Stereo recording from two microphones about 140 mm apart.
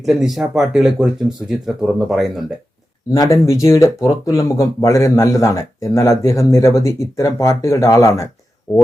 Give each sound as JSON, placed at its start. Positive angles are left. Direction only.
{"t": 0.0, "sound": "speech", "side_deg": 0}
{"t": 3.1, "sound": "speech", "side_deg": 25}